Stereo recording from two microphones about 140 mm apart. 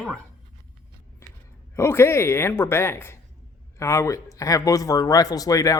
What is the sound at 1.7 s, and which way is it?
A woman's voice, 20° left (ahead or behind).